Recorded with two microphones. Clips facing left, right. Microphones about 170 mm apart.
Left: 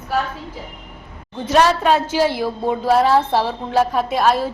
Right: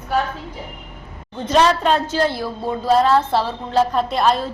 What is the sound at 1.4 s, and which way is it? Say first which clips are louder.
A woman's voice: left 1 dB; 5° left (ahead or behind).